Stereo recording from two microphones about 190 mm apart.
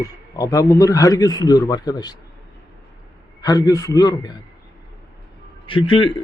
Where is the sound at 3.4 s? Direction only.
20° left (ahead or behind).